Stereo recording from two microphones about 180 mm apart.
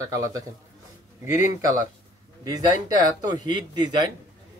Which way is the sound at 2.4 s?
20° right (ahead or behind).